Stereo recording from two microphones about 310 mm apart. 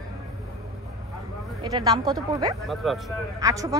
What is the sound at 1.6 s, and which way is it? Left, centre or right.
Speech, centre.